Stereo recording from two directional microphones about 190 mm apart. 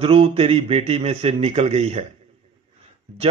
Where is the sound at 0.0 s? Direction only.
30° right (ahead or behind).